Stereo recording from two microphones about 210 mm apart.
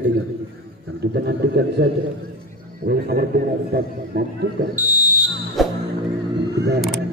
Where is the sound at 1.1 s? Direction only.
50° right (ahead or behind).